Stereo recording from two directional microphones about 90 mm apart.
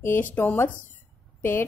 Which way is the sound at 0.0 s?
25° left (ahead or behind).